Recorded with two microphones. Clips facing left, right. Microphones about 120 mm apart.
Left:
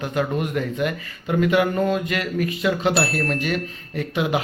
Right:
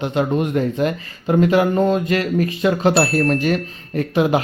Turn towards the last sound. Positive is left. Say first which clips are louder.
# right 6 dB
turn(degrees=-35)  # may be behind; listen again after turning